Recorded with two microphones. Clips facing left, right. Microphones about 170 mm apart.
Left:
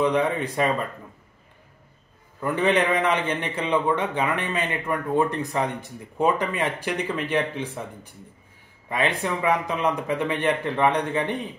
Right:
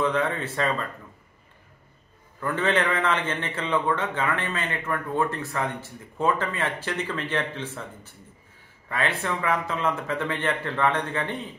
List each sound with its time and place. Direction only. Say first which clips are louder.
0.0 s a man's voice: left 3 dB; 15° left (ahead or behind)
2.4 s a man's voice: left 3 dB; 15° left (ahead or behind)